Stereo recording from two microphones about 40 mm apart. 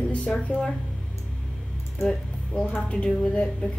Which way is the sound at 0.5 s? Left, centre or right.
Left.